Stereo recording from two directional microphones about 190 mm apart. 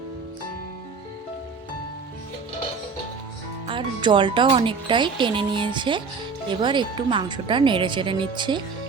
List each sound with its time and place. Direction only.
3.7 s speech: 25° right (ahead or behind)